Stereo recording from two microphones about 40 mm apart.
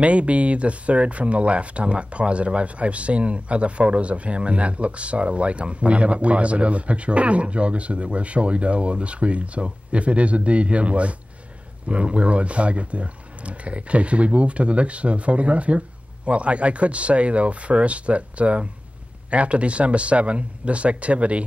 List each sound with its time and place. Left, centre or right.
0.0 s speech: right